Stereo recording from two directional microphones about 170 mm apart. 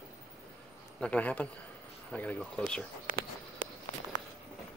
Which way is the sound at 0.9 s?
5° left (ahead or behind).